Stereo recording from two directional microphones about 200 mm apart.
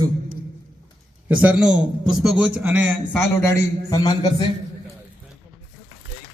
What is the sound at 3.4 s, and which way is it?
A man's voice, 15° left (ahead or behind).